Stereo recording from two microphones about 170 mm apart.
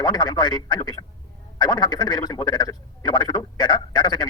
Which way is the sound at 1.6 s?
25° left (ahead or behind).